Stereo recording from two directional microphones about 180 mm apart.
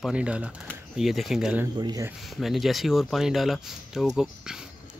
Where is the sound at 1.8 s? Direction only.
20° right (ahead or behind).